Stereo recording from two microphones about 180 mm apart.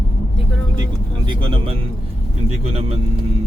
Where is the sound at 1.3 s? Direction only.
30° right (ahead or behind).